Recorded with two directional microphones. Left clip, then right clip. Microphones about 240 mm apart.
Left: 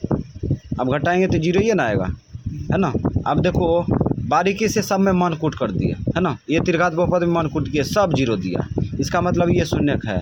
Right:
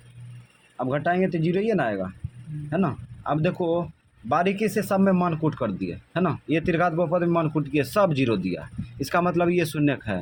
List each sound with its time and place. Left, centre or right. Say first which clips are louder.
0.8 s a man's voice: left 5 dB; left